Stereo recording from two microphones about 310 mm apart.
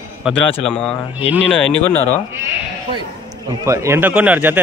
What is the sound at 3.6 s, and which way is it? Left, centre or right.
Speech, centre.